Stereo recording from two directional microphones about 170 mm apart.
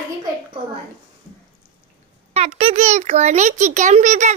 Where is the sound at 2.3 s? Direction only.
35° right (ahead or behind).